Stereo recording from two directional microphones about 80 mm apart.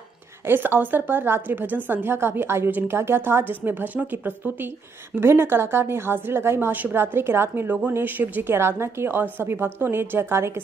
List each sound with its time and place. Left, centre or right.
0.5 s a woman's voice: right